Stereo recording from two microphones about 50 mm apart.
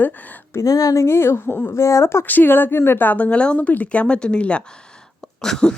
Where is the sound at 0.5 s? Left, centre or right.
Left.